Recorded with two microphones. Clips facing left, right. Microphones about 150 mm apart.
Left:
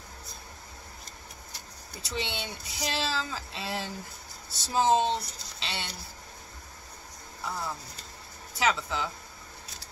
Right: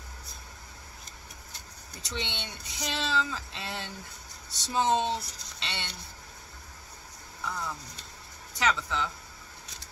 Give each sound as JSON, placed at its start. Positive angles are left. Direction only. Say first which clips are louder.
{"t": 2.0, "sound": "speech", "louder": "left 3 dB", "side_deg": 5}
{"t": 7.4, "sound": "speech", "louder": "left 1 dB", "side_deg": 30}
{"t": 8.5, "sound": "speech", "louder": "left 1 dB", "side_deg": 5}